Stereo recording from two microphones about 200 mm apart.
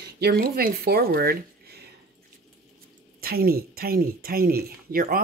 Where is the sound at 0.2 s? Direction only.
50° right (ahead or behind).